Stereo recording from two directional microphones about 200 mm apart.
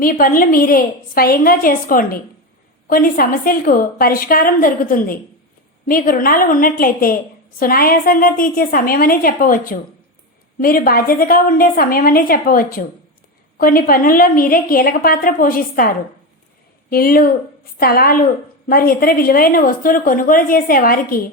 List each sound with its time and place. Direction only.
0.0 s a woman's voice: 45° left (ahead or behind)
16.9 s a woman's voice: 45° left (ahead or behind)